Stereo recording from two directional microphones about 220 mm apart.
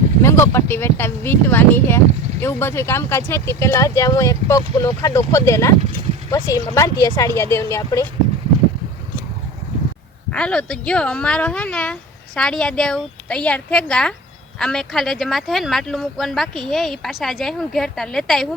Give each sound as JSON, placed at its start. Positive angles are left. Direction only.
{"t": 0.2, "sound": "speech", "side_deg": 10}
{"t": 10.3, "sound": "speech", "side_deg": 5}